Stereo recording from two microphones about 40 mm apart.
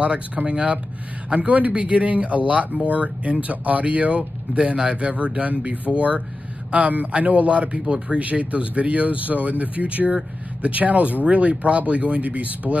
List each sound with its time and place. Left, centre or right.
0.5 s speech: right